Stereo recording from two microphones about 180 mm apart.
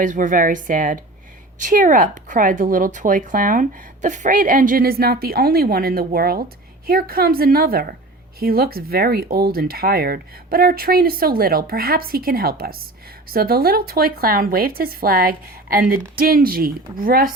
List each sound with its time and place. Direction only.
0.0 s speech: 45° right (ahead or behind)